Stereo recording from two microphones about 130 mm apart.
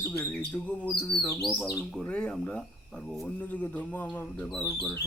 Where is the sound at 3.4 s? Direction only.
10° left (ahead or behind).